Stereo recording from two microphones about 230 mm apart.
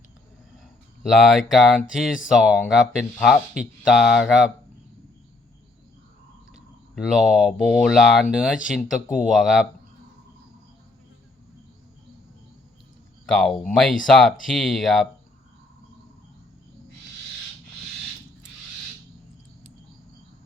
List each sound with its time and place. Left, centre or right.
1.0 s speech: centre
6.9 s speech: centre
13.2 s speech: centre